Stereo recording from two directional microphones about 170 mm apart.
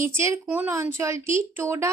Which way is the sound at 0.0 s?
15° right (ahead or behind).